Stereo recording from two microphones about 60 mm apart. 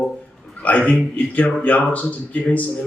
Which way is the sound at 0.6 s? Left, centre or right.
Left.